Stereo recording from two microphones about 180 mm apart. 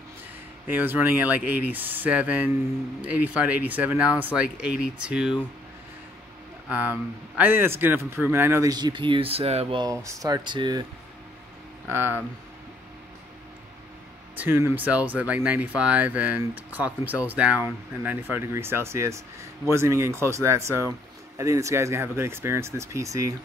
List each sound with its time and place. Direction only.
0.7 s speech: 10° right (ahead or behind)
6.7 s speech: 10° right (ahead or behind); by 10.9 s 25° right (ahead or behind)
11.9 s speech: 10° right (ahead or behind)
14.3 s speech: 10° right (ahead or behind)